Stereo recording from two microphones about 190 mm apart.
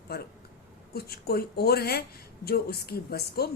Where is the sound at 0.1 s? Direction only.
55° left (ahead or behind).